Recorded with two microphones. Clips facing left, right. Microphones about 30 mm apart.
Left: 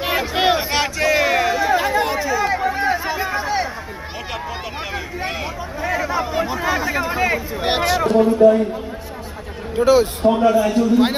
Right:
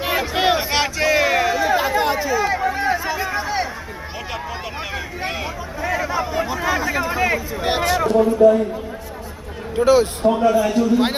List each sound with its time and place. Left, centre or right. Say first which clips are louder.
0.0 s a sound: left 1 dB; centre
4.9 s a sound: left 1 dB; centre
7.6 s a man's voice: left 1 dB; left
9.7 s a man's voice: even; centre
10.2 s a man's voice: left 2 dB; left
10.5 s a man's voice: left 1 dB; centre